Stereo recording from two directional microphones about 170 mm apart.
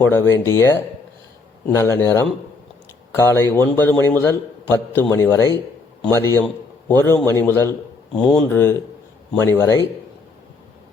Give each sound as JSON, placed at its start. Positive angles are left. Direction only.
{"t": 0.0, "sound": "a man's voice", "side_deg": 15}
{"t": 8.1, "sound": "a man's voice", "side_deg": 5}